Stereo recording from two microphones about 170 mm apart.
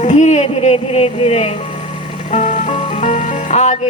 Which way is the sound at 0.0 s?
45° left (ahead or behind).